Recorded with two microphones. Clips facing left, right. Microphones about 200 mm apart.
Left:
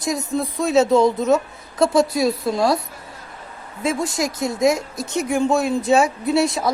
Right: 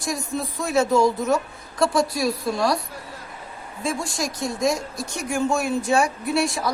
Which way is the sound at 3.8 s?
20° left (ahead or behind).